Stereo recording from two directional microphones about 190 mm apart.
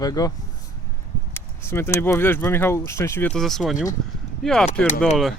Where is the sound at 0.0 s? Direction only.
20° left (ahead or behind); by 4.9 s 5° left (ahead or behind).